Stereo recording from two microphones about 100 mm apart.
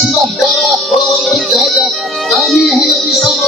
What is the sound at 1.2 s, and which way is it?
Speech, centre (ahead or behind).